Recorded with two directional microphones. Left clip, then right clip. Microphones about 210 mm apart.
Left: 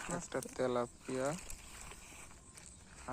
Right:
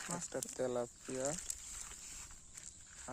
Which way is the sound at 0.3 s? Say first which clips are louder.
Left 3 dB; 10° right (ahead or behind).